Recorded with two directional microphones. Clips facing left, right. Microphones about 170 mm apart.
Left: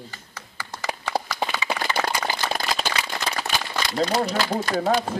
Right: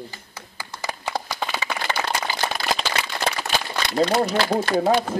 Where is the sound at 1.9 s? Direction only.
50° left (ahead or behind).